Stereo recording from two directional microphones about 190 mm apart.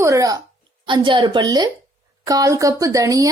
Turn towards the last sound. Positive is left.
turn(degrees=-20)  # may be behind; listen again after turning